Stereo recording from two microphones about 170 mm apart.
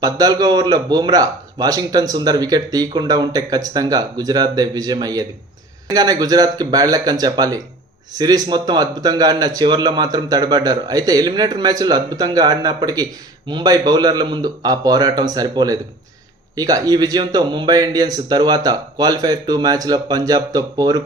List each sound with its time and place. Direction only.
0.0 s a man's voice: 25° right (ahead or behind)